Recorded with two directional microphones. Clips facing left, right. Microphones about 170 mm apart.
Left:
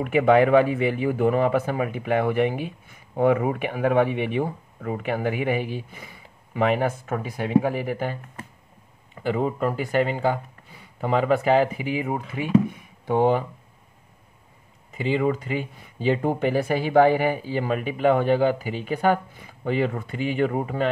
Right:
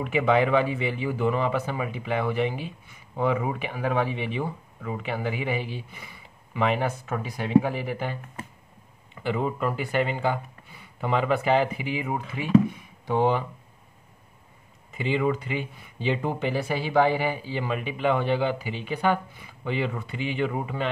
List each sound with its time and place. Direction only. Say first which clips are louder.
0.0 s speech: left 5 dB; 50° left (ahead or behind)
15.0 s speech: left 2 dB; 40° left (ahead or behind)